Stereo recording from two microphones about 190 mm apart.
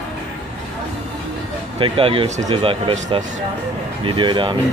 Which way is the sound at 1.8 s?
30° right (ahead or behind).